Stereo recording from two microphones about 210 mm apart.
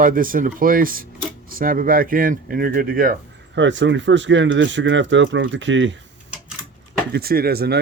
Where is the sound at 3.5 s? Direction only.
60° right (ahead or behind).